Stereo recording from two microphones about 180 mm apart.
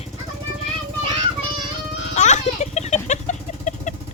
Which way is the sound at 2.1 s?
40° left (ahead or behind).